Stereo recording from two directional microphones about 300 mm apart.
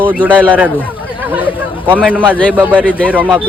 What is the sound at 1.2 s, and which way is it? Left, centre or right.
Chatter, centre.